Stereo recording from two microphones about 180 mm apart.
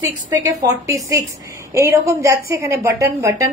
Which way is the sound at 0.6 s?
20° right (ahead or behind).